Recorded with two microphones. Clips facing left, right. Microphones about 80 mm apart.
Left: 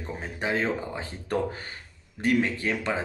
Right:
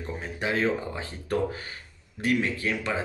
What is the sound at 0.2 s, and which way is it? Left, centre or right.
Speech, left.